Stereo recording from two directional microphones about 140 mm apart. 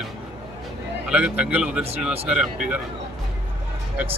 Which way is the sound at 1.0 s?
10° right (ahead or behind).